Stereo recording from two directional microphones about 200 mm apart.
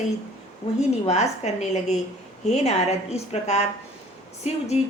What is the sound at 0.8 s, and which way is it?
A woman's voice, 35° left (ahead or behind).